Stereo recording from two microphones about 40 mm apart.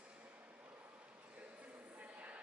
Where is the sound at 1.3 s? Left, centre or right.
Right.